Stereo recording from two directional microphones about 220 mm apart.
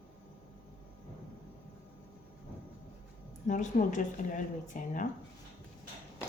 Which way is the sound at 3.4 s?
35° left (ahead or behind).